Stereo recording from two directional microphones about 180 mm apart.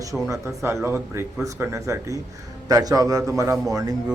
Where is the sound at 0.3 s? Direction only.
15° right (ahead or behind).